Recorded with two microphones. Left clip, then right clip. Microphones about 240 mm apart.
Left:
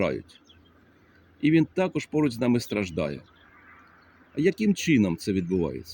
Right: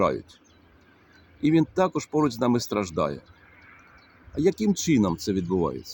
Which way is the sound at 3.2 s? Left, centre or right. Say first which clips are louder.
Right 1 dB; right.